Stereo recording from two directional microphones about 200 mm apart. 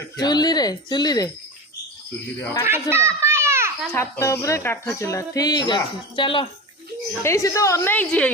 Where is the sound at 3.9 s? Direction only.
15° left (ahead or behind).